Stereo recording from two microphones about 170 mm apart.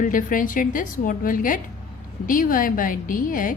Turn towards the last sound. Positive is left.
turn(degrees=55)  # may be behind; listen again after turning